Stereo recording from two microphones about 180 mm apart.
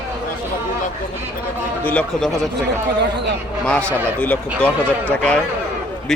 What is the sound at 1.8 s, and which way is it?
Speech, 5° left (ahead or behind).